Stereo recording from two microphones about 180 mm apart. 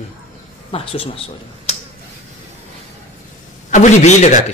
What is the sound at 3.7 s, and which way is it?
Speech, 40° left (ahead or behind).